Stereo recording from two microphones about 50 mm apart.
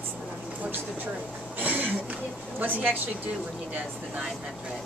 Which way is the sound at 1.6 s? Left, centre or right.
Right.